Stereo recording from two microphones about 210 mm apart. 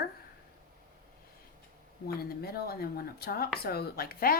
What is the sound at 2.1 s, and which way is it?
A woman's voice, 45° left (ahead or behind).